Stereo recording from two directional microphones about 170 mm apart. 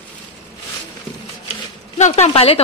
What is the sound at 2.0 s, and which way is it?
Speech, 40° left (ahead or behind).